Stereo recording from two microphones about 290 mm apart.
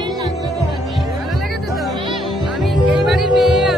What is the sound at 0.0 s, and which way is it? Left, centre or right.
Music, centre.